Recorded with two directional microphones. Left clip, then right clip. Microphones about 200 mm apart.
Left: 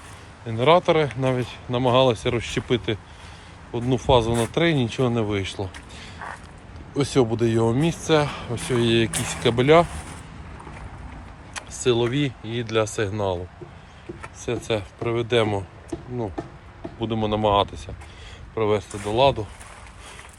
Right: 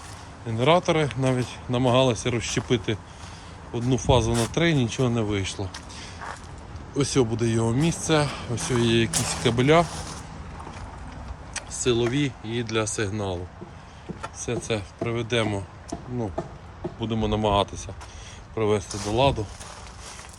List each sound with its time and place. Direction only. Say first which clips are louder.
0.4 s speech: left 3 dB; 10° right (ahead or behind)
6.9 s speech: left 2 dB; 5° right (ahead or behind)
11.5 s speech: left 2 dB; centre (ahead or behind)
14.4 s speech: left 3 dB; 5° right (ahead or behind)
15.9 s music: left 2 dB; 55° right (ahead or behind)
17.0 s speech: left 3 dB; 10° right (ahead or behind)